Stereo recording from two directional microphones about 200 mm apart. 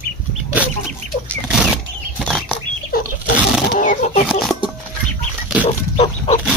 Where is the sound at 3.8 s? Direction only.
40° left (ahead or behind).